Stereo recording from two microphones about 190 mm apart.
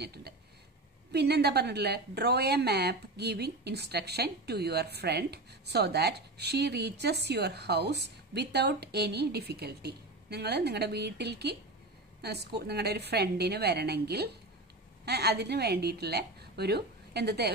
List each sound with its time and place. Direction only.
0.0 s speech: 60° right (ahead or behind)